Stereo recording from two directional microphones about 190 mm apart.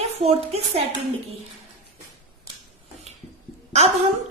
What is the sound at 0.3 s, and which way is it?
Speech, 35° right (ahead or behind).